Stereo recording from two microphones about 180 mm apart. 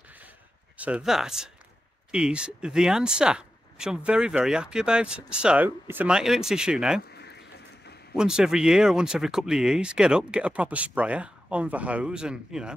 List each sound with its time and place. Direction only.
0.7 s speech: 5° right (ahead or behind)
7.2 s a sound: 65° left (ahead or behind)
8.2 s speech: 5° right (ahead or behind)